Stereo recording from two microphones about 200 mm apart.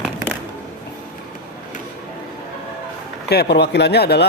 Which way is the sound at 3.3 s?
55° left (ahead or behind).